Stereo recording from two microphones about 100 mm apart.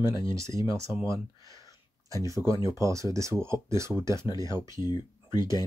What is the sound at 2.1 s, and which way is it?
Speech, 35° right (ahead or behind).